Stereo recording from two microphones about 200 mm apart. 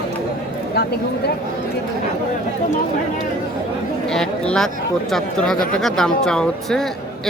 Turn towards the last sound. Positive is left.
turn(degrees=5)  # may be behind; listen again after turning